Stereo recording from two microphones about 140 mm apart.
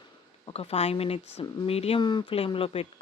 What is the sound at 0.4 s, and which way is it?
A man's voice, 40° left (ahead or behind).